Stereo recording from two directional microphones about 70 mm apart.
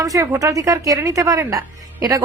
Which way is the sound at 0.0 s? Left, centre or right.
Right.